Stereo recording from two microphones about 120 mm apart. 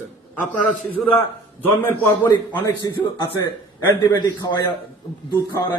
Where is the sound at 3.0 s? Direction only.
35° left (ahead or behind).